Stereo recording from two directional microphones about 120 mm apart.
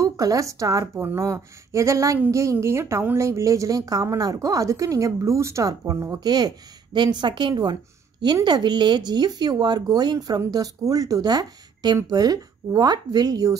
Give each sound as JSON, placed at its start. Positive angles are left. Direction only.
{"t": 0.0, "sound": "a woman's voice", "side_deg": -25}